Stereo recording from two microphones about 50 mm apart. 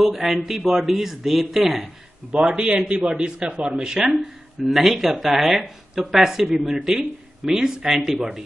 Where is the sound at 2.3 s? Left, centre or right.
Centre.